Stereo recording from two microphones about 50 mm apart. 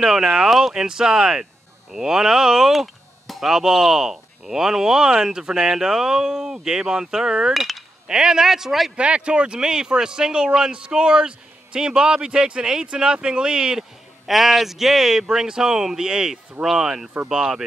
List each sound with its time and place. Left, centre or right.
0.0 s speech: centre
7.5 s speech: centre
8.1 s speech: centre
8.9 s speech: right
14.2 s speech: centre